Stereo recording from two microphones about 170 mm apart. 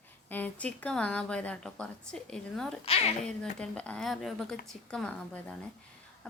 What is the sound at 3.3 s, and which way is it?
Speech, 5° left (ahead or behind).